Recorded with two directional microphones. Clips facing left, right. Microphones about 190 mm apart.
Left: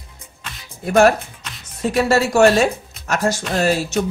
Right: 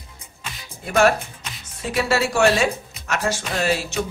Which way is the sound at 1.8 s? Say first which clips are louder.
Left 5 dB; 45° left (ahead or behind).